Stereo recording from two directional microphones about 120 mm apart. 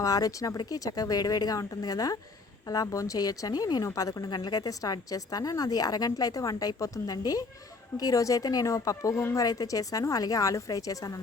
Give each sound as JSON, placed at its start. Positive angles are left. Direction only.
{"t": 0.0, "sound": "a woman's voice", "side_deg": 30}